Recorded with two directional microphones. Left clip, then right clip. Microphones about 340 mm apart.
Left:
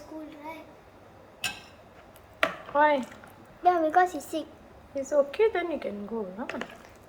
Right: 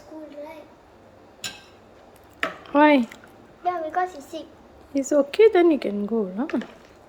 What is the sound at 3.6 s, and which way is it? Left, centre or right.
Speech, centre.